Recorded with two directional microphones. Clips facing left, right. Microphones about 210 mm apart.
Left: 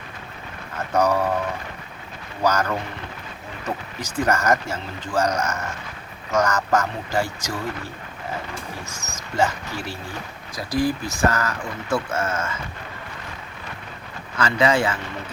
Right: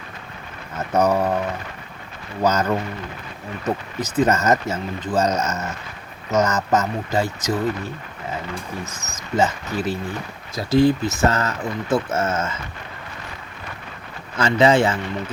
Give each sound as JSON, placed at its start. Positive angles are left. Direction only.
{"t": 0.9, "sound": "speech", "side_deg": -20}
{"t": 2.4, "sound": "speech", "side_deg": -20}
{"t": 4.0, "sound": "speech", "side_deg": -20}
{"t": 9.3, "sound": "speech", "side_deg": -20}
{"t": 14.3, "sound": "speech", "side_deg": -25}